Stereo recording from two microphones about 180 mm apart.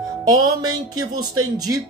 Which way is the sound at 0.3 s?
20° right (ahead or behind).